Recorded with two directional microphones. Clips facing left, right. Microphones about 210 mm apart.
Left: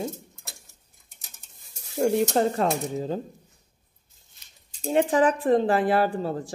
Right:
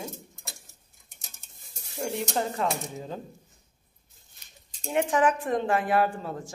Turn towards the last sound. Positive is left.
turn(degrees=35)  # may be behind; listen again after turning